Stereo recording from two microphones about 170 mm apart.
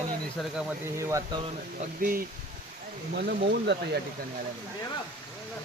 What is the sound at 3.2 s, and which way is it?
Speech, 65° right (ahead or behind).